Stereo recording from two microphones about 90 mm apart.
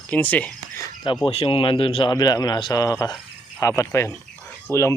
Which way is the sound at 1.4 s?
80° left.